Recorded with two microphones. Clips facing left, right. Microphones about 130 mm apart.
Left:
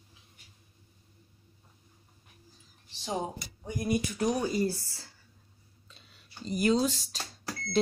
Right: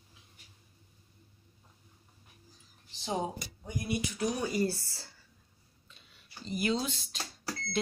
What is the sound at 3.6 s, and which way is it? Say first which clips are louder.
Speech: left 4 dB; 45° left (ahead or behind).